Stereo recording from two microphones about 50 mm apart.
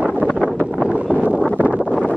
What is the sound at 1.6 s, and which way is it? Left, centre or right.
Wind noise, right.